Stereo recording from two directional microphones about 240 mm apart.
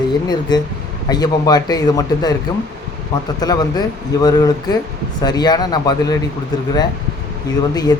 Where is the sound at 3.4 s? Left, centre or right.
Centre.